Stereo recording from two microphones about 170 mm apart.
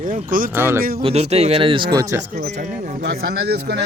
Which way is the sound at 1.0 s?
35° right (ahead or behind).